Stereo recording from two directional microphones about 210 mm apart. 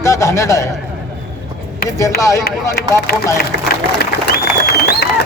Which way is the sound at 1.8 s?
15° left (ahead or behind).